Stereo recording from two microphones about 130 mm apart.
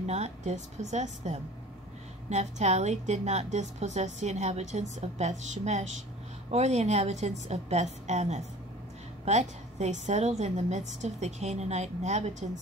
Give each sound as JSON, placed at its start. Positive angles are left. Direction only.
{"t": 0.0, "sound": "a woman's voice", "side_deg": -55}